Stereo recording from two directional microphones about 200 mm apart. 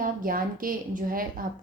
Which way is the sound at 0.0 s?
45° right (ahead or behind).